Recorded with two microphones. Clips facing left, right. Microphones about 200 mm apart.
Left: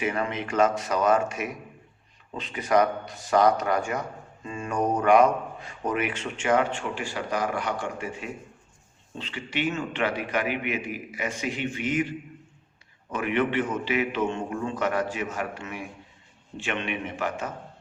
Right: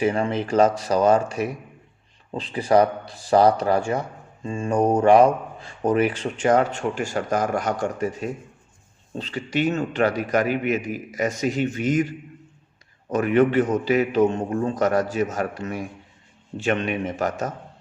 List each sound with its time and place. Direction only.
0.0 s speech: 30° right (ahead or behind)